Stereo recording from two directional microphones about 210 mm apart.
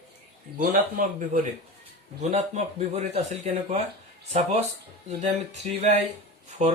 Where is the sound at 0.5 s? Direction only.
40° right (ahead or behind).